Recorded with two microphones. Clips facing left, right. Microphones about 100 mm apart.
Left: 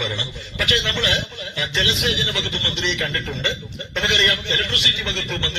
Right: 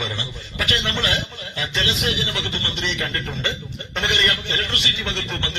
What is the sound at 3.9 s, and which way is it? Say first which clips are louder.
Speech: left 1 dB; 45° right (ahead or behind).